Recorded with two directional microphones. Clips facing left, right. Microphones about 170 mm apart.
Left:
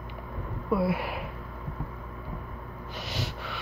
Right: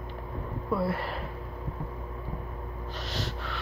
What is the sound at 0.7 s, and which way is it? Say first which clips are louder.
Speech: left 3 dB; 5° left (ahead or behind).